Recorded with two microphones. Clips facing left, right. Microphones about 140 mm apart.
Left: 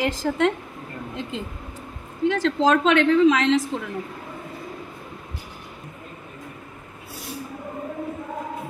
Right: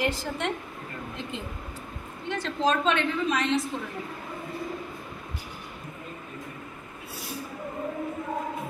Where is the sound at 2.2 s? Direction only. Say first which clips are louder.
Left 7 dB; 90° left.